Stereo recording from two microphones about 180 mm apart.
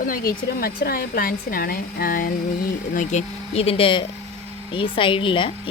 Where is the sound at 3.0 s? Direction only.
40° left (ahead or behind).